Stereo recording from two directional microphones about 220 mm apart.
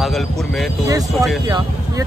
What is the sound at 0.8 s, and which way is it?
Speech, 15° right (ahead or behind).